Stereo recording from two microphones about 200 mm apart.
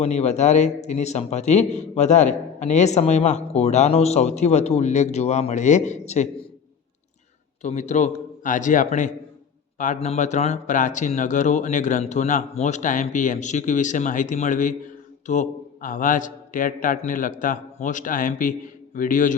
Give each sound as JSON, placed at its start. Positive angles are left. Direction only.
{"t": 0.0, "sound": "a man's voice", "side_deg": 35}
{"t": 7.6, "sound": "a man's voice", "side_deg": 35}